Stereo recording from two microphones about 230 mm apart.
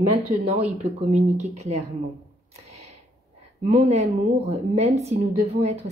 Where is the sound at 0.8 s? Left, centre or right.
Right.